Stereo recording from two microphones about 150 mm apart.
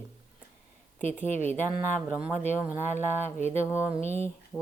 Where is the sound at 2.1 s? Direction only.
10° right (ahead or behind).